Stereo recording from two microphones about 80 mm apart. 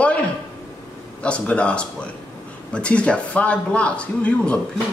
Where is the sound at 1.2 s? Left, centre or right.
Centre.